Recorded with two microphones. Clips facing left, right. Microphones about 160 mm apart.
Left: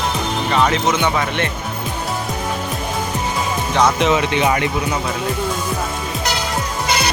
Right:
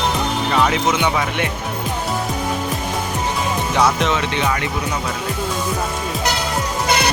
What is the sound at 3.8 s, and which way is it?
Speech, centre (ahead or behind).